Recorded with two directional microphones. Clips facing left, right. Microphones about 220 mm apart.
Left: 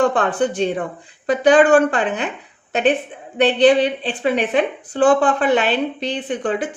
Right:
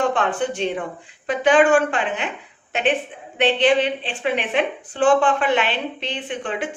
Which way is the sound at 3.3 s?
35° left (ahead or behind).